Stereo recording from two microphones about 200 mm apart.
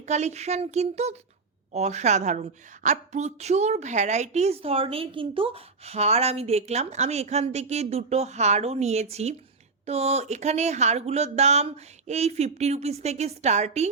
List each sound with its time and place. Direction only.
0.0 s a woman's voice: 35° right (ahead or behind)